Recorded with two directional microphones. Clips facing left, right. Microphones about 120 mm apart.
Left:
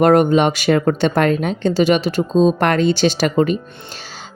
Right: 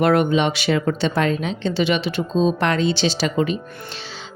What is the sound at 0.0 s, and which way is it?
A woman's voice, 45° left (ahead or behind).